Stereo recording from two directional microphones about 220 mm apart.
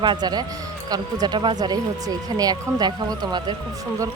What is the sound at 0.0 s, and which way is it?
Speech, 20° right (ahead or behind).